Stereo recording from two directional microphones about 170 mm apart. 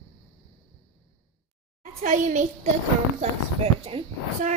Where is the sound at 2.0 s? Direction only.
45° right (ahead or behind).